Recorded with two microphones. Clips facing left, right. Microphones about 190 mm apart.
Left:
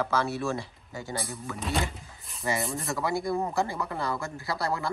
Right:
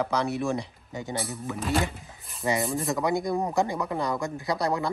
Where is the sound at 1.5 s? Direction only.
Centre (ahead or behind).